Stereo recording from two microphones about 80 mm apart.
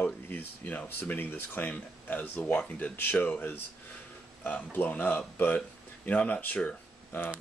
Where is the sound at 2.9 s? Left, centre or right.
Left.